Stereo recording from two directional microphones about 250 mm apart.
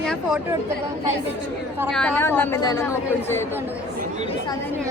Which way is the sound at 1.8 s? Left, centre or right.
Centre.